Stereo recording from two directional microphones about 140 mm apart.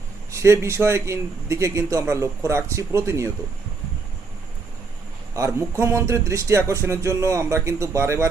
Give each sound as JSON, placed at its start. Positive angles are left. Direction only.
{"t": 0.3, "sound": "speech", "side_deg": -20}
{"t": 5.3, "sound": "speech", "side_deg": -20}